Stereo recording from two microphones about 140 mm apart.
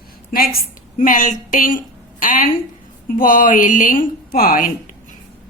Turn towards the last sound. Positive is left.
turn(degrees=85)